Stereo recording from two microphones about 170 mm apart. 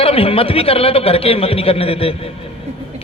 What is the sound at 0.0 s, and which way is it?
A man's voice, 35° left (ahead or behind).